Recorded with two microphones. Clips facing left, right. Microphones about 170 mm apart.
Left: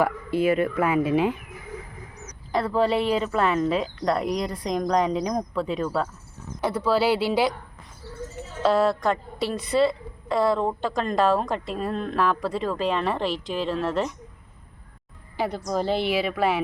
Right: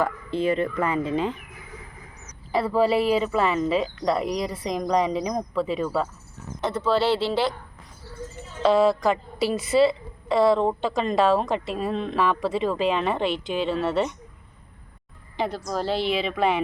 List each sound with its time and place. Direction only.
0.0 s speech: 5° left (ahead or behind)
2.5 s a woman's voice: 5° right (ahead or behind)
6.6 s speech: 10° left (ahead or behind)
8.6 s a woman's voice: centre (ahead or behind)
15.4 s a woman's voice: 15° left (ahead or behind)